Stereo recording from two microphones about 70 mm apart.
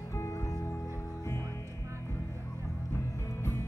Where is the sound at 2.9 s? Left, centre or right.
Left.